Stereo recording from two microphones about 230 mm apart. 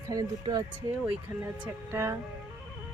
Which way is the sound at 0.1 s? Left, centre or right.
Centre.